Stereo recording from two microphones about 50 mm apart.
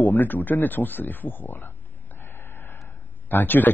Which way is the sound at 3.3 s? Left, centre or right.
Left.